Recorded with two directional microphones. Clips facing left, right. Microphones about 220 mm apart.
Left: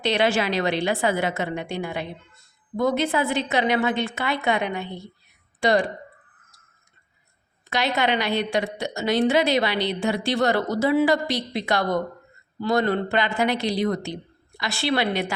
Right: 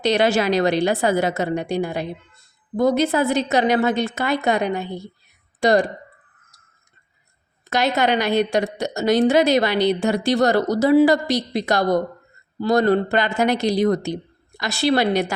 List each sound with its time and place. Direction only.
0.0 s a woman's voice: 40° right (ahead or behind)
7.7 s a woman's voice: 45° right (ahead or behind)